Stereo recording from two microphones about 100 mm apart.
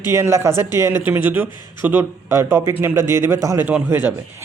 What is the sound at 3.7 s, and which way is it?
Speech, 15° right (ahead or behind).